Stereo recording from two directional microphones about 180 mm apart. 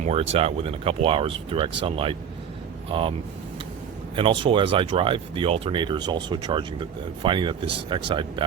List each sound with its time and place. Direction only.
0.0 s speech: 35° right (ahead or behind)